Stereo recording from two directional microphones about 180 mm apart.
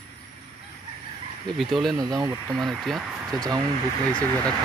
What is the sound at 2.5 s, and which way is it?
Speech, centre (ahead or behind).